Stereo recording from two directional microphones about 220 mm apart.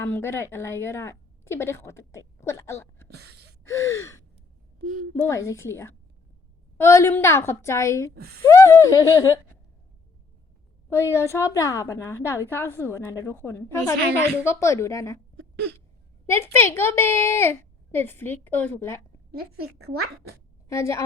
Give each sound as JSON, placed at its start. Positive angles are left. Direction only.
{"t": 0.0, "sound": "a woman's voice", "side_deg": 10}
{"t": 5.3, "sound": "a woman's voice", "side_deg": 15}
{"t": 8.1, "sound": "speech", "side_deg": -45}
{"t": 8.4, "sound": "a woman's voice", "side_deg": 15}
{"t": 10.8, "sound": "a woman's voice", "side_deg": 10}
{"t": 16.3, "sound": "a woman's voice", "side_deg": 10}
{"t": 20.7, "sound": "a woman's voice", "side_deg": 15}